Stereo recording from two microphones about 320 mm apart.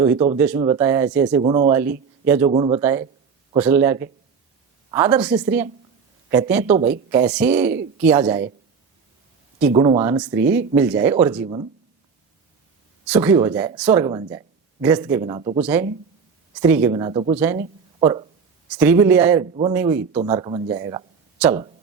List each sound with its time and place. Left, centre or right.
0.0 s speech: centre
2.2 s speech: centre
2.5 s speech: centre
2.8 s a woman's voice: centre
9.7 s speech: centre
11.4 s speech: centre
13.1 s speech: centre
15.6 s a woman's voice: centre